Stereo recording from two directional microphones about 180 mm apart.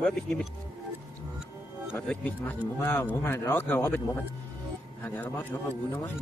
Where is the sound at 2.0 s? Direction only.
10° left (ahead or behind).